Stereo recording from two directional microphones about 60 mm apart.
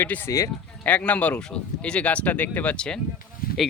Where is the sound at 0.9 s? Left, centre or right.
Left.